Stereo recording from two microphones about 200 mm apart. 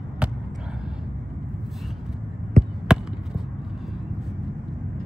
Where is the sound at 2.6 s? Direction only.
35° right (ahead or behind).